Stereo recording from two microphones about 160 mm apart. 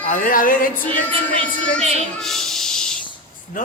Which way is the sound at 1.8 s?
40° right (ahead or behind).